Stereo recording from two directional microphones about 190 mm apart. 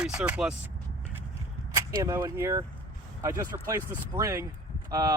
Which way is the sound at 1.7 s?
15° right (ahead or behind).